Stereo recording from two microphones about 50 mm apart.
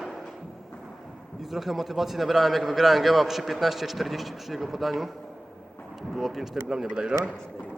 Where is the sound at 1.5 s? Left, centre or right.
Centre.